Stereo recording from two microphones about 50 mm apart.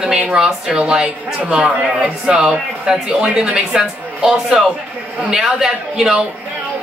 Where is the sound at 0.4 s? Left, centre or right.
Centre.